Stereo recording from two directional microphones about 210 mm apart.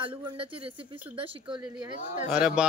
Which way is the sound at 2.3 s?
5° right (ahead or behind).